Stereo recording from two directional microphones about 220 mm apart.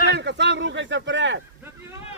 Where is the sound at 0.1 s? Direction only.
50° right (ahead or behind).